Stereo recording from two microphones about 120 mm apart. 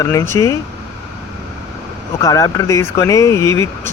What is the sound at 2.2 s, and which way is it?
Speech, 30° left (ahead or behind).